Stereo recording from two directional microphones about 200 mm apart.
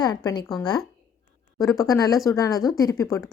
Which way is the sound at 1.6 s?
15° left (ahead or behind).